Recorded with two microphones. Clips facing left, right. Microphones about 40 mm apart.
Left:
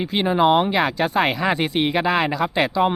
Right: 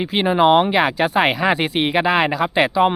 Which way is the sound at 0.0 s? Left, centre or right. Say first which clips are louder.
Right 2 dB; right.